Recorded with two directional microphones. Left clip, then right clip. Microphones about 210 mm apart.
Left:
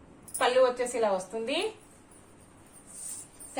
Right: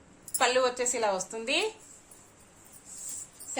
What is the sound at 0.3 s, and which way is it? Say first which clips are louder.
A woman's voice: left 2 dB; 50° right (ahead or behind).